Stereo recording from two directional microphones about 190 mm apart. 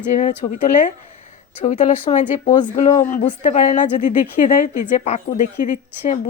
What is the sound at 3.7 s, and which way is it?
Speech, 40° left (ahead or behind).